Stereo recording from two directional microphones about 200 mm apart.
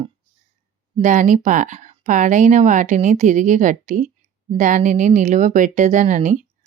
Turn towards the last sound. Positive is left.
turn(degrees=-35)  # may be behind; listen again after turning